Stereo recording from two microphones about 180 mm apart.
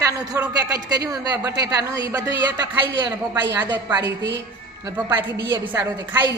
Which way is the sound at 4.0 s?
75° right (ahead or behind).